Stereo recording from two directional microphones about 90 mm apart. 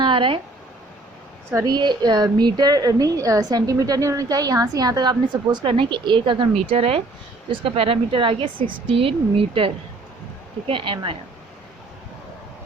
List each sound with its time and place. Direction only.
0.0 s a sound: 70° right (ahead or behind)
1.6 s a woman's voice: 55° right (ahead or behind); by 9.7 s 90° right
10.7 s speech: 75° right (ahead or behind)